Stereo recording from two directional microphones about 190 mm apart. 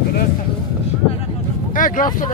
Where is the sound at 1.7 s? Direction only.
45° left (ahead or behind).